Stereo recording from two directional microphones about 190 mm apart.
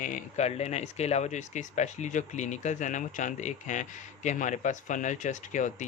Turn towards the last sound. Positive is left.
turn(degrees=40)  # may be behind; listen again after turning